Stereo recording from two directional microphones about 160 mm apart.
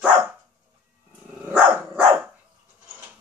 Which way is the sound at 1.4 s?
10° right (ahead or behind).